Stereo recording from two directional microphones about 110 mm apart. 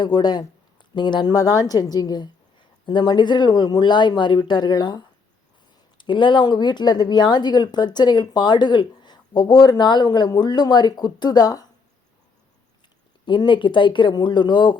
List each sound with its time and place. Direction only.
0.0 s speech: 40° left (ahead or behind)
13.2 s speech: 45° left (ahead or behind)